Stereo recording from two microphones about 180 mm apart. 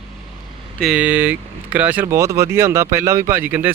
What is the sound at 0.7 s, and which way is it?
Speech, centre (ahead or behind).